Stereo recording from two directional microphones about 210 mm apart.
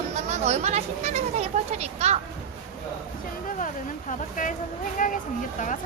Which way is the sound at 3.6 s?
35° left (ahead or behind).